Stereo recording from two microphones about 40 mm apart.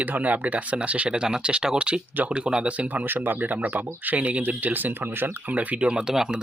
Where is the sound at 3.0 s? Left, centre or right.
Right.